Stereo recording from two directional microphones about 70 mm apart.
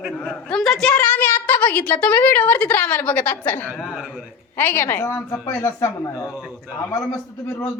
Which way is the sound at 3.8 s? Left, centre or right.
Centre.